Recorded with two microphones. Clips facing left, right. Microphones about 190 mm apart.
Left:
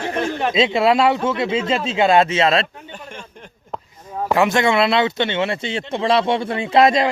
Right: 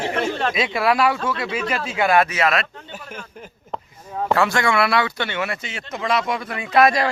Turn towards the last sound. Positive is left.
turn(degrees=25)  # may be behind; listen again after turning